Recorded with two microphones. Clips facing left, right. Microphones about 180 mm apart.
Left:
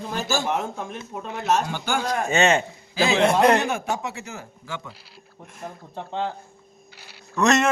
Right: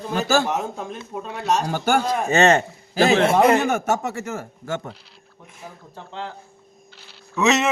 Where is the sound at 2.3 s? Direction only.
40° right (ahead or behind).